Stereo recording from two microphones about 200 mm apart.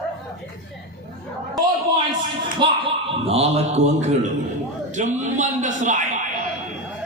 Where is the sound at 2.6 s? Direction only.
25° right (ahead or behind).